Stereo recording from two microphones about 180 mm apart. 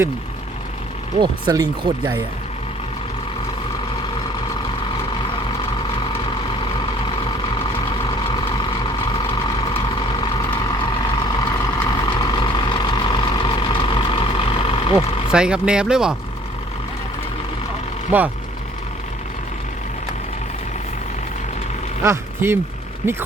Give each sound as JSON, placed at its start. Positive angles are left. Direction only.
{"t": 1.2, "sound": "speech", "side_deg": -25}
{"t": 8.0, "sound": "vehicle", "side_deg": 25}
{"t": 15.3, "sound": "speech", "side_deg": -5}
{"t": 18.1, "sound": "speech", "side_deg": -10}
{"t": 22.0, "sound": "speech", "side_deg": -15}